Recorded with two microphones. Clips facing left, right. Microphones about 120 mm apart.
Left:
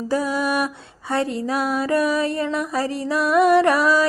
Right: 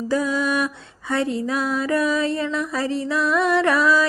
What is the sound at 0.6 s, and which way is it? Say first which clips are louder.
Music: even; 40° left (ahead or behind).